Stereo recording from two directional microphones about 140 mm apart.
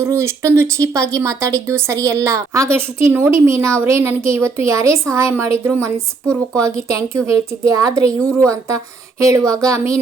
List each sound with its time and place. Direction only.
0.0 s speech: 20° right (ahead or behind)